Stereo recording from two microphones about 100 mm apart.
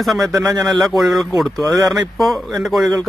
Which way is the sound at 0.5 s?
45° right (ahead or behind).